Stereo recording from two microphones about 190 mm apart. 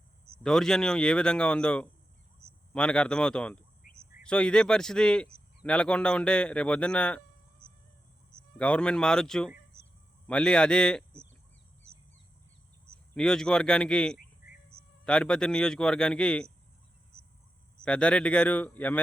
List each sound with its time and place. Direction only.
0.4 s speech: 5° left (ahead or behind)
3.8 s cricket: 45° left (ahead or behind)
4.2 s speech: 5° left (ahead or behind)
8.5 s speech: 5° left (ahead or behind)
13.1 s speech: 5° left (ahead or behind)
17.8 s speech: 5° left (ahead or behind)